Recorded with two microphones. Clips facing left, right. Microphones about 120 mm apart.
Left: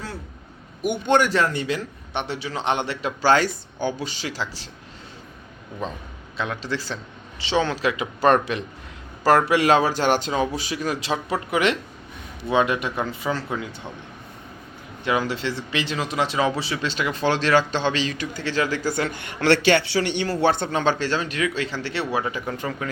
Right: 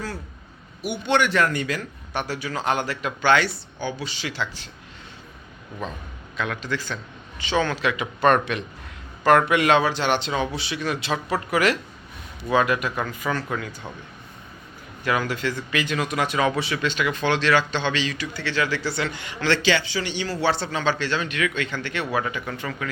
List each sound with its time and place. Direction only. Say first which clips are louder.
0.8 s a man's voice: left 3 dB; 50° left (ahead or behind)
1.4 s speech: even; 30° left (ahead or behind)
6.3 s speech: even; 30° left (ahead or behind)
15.0 s a man's voice: left 1 dB; 20° left (ahead or behind); by 20.7 s 50° left (ahead or behind)
21.0 s speech: left 1 dB; 40° left (ahead or behind)